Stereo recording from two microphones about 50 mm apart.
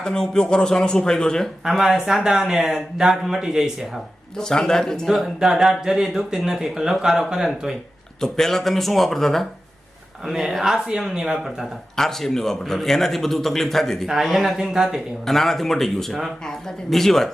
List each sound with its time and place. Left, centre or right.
0.0 s a man's voice: centre
1.6 s speech: centre
4.4 s a man's voice: centre
5.0 s speech: centre
8.2 s a man's voice: centre
14.3 s speech: centre
15.2 s speech: centre